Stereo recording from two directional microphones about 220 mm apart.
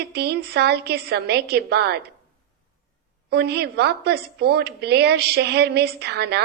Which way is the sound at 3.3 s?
50° right (ahead or behind).